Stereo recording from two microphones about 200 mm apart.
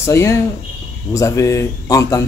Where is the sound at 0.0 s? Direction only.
15° left (ahead or behind).